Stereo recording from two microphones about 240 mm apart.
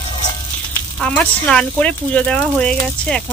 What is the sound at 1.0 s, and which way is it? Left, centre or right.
Speech, centre.